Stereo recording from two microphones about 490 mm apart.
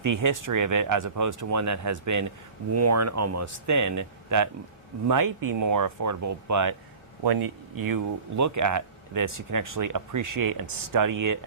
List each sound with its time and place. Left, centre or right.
0.0 s speech: right